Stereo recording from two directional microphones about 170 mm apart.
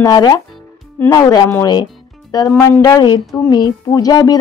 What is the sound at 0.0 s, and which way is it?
A woman's voice, 20° left (ahead or behind).